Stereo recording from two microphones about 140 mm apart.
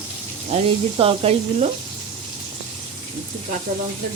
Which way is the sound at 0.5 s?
45° right (ahead or behind).